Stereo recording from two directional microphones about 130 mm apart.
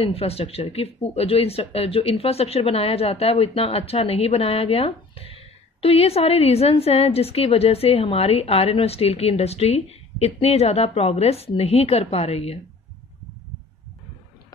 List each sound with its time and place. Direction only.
0.0 s speech: 50° left (ahead or behind)